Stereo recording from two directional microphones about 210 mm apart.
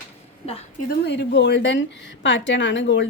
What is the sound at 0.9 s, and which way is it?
A woman's voice, 55° left (ahead or behind).